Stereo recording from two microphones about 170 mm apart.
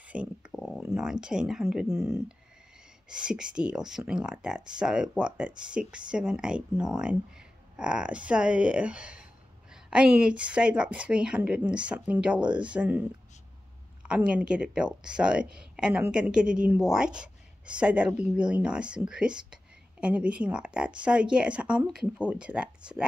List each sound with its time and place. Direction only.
0.1 s a sound: 5° right (ahead or behind)
1.2 s speech: 5° right (ahead or behind)
2.0 s a woman's voice: 20° right (ahead or behind)
3.1 s a woman's voice: 5° right (ahead or behind)
14.0 s speech: 5° right (ahead or behind)